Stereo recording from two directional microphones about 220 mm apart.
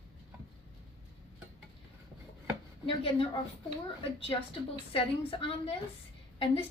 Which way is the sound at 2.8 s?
25° left (ahead or behind).